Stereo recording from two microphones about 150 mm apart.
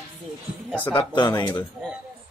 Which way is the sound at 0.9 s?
30° left (ahead or behind).